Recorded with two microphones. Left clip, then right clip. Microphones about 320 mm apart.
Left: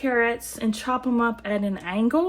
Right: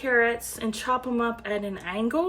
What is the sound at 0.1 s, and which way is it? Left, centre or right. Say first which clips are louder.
Speech: right 2 dB; centre.